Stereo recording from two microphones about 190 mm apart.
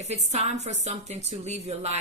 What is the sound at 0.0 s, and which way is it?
A woman's voice, 35° right (ahead or behind).